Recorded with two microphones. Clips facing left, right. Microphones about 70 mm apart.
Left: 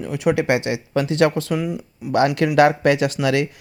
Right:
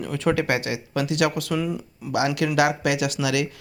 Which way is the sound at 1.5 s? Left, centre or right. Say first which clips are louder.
Left 2 dB; centre.